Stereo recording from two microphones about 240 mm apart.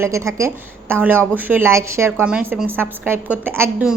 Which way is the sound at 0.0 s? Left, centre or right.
Centre.